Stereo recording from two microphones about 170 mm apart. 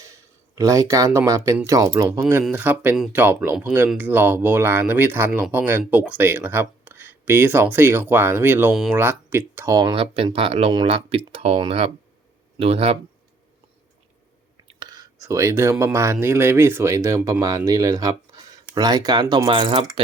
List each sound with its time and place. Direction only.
0.0 s speech: 20° right (ahead or behind); by 3.2 s centre (ahead or behind)
3.2 s speech: 10° right (ahead or behind)
8.7 s speech: centre (ahead or behind)
9.0 s speech: 15° right (ahead or behind)
9.7 s speech: 25° right (ahead or behind)
14.8 s whispering: 25° right (ahead or behind)
15.7 s speech: 15° right (ahead or behind); by 19.8 s 30° right (ahead or behind)